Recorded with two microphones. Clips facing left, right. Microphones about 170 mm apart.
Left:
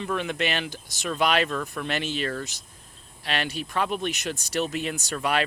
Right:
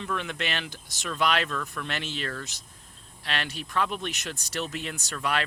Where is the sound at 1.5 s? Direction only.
25° left (ahead or behind).